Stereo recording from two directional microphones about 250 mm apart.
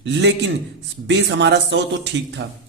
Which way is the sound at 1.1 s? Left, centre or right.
Right.